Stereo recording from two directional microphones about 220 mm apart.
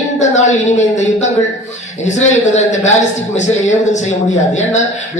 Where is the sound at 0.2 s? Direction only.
30° left (ahead or behind).